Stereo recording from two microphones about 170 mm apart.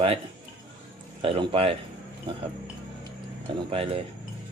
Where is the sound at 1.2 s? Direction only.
35° right (ahead or behind).